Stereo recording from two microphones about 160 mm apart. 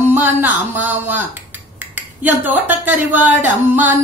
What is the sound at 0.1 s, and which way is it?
Speech, 10° right (ahead or behind).